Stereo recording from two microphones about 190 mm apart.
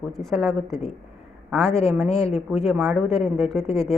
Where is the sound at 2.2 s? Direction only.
35° left (ahead or behind).